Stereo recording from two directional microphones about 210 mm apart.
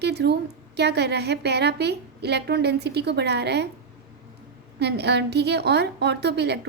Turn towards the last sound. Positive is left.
turn(degrees=-50)  # may be behind; listen again after turning